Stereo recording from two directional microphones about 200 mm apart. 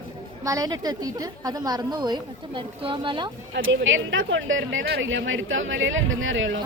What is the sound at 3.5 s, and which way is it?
Speech, 70° right (ahead or behind).